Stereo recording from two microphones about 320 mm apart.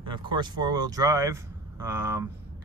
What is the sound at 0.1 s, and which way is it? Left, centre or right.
Speech, centre.